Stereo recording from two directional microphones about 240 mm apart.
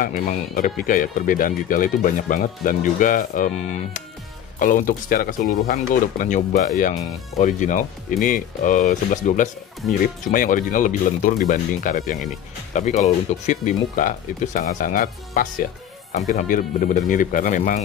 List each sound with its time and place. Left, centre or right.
0.0 s speech: left